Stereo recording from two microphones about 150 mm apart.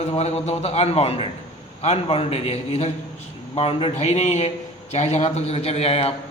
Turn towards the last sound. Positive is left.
turn(degrees=40)  # may be behind; listen again after turning